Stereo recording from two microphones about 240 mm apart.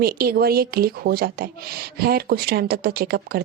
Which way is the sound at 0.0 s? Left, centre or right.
Right.